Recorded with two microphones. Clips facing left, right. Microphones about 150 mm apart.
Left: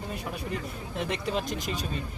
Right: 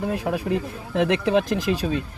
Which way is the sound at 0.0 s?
90° right.